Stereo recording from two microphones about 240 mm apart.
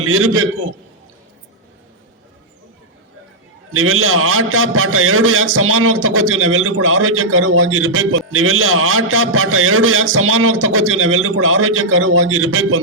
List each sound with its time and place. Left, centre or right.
0.0 s a man's voice: right
3.7 s a man's voice: right